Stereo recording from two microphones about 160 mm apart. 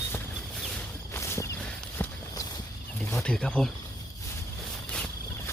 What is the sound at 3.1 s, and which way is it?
Speech, 10° left (ahead or behind).